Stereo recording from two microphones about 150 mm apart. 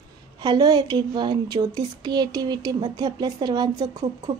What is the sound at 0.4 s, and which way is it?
Speech, 30° right (ahead or behind).